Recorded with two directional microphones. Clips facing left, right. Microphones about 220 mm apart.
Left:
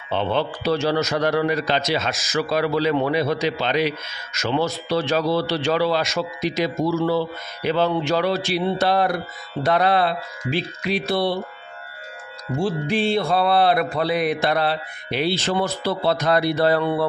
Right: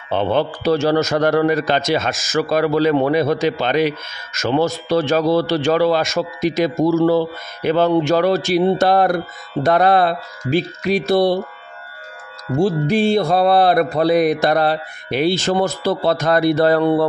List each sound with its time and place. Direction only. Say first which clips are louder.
0.1 s a man's voice: right 4 dB; 50° right (ahead or behind)
12.5 s a man's voice: right 6 dB; 40° right (ahead or behind)